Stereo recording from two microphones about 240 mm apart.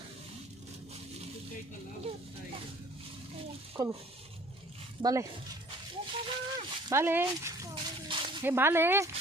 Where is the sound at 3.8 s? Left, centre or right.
Centre.